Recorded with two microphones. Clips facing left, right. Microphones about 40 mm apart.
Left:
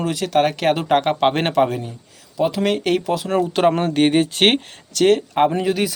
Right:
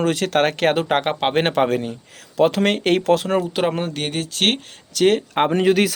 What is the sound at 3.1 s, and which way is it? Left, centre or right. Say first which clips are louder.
Speech: right 5 dB; right.